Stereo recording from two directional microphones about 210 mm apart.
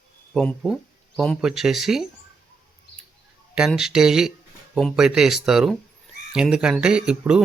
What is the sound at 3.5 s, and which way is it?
Speech, 5° right (ahead or behind).